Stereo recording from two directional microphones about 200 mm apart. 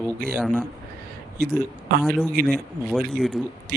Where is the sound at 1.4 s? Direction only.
45° right (ahead or behind).